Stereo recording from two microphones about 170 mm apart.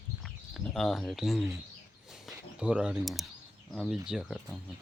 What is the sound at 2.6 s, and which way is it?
Speech, 5° right (ahead or behind).